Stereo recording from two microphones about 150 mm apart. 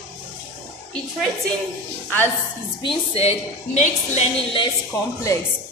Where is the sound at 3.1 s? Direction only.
45° left (ahead or behind).